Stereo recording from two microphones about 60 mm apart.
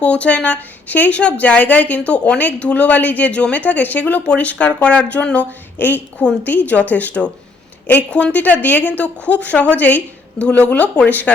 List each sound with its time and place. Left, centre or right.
0.0 s speech: left
5.8 s a woman's voice: left